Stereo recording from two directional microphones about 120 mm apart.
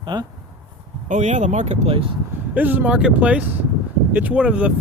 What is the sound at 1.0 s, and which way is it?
Speech, 90° right.